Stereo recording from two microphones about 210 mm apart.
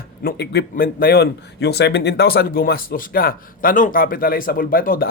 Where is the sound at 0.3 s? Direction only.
50° left (ahead or behind).